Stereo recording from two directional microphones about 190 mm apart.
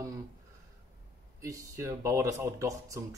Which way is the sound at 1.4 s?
15° right (ahead or behind).